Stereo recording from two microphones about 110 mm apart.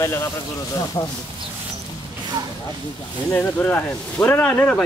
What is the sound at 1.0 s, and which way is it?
Speech, 40° left (ahead or behind).